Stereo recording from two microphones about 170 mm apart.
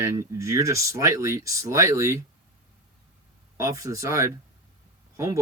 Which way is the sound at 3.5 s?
20° right (ahead or behind).